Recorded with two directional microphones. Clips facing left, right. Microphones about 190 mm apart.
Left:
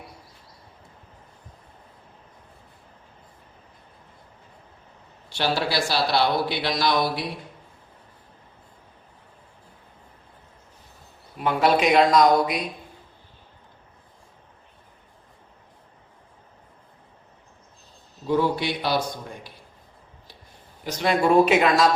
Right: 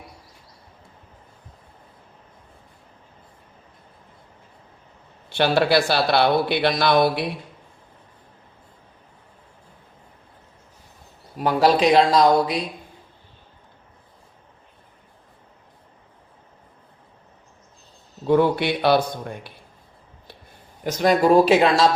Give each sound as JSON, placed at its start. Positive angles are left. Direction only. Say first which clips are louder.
{"t": 5.3, "sound": "speech", "louder": "right 7 dB", "side_deg": -60}
{"t": 11.3, "sound": "speech", "louder": "right 3 dB", "side_deg": -35}
{"t": 18.3, "sound": "speech", "louder": "right 5 dB", "side_deg": -60}
{"t": 20.8, "sound": "speech", "louder": "right 4 dB", "side_deg": -45}